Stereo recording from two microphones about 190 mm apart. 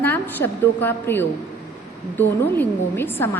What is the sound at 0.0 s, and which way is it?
A woman's voice, 10° left (ahead or behind).